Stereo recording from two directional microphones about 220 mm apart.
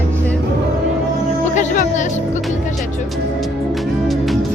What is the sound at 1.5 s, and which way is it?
Music, 35° left (ahead or behind).